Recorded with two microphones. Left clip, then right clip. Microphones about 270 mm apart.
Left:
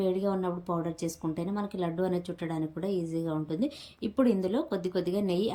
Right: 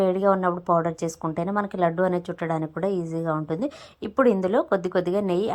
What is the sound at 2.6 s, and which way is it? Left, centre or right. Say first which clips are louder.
Speech: right 6 dB; centre.